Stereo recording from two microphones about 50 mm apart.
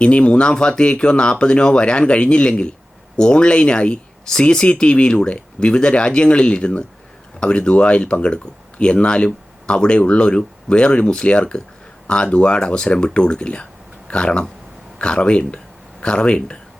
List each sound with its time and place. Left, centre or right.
0.0 s speech: left